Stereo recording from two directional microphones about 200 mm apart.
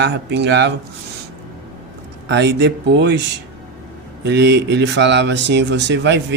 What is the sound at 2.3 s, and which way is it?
Speech, 60° right (ahead or behind).